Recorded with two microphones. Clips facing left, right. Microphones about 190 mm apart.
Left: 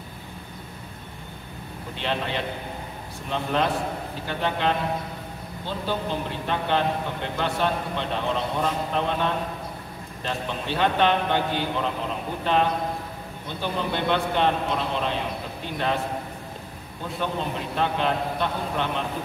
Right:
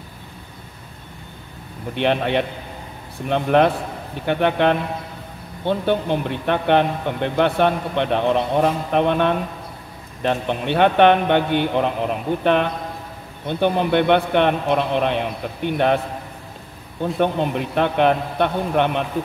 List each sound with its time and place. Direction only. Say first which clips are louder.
2.0 s a man's voice: right 9 dB; 60° right (ahead or behind)
17.2 s a man's voice: right 8 dB; 60° right (ahead or behind)